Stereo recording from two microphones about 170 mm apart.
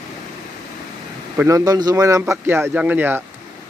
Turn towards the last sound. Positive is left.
turn(degrees=-10)  # may be behind; listen again after turning